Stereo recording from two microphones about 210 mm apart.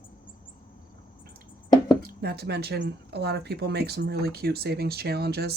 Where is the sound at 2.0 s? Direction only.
50° right (ahead or behind).